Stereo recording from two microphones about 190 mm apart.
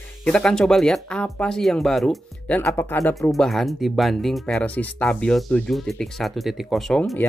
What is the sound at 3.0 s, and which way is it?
Speech, centre (ahead or behind).